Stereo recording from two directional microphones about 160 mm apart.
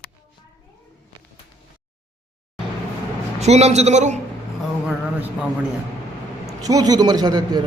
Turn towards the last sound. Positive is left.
turn(degrees=-25)  # may be behind; listen again after turning